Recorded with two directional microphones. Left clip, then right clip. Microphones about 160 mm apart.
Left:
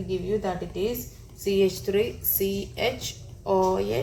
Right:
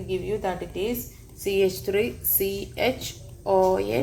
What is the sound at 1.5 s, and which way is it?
A woman's voice, 50° right (ahead or behind).